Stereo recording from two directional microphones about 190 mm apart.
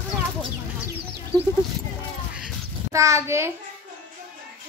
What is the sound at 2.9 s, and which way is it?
Speech, 15° right (ahead or behind).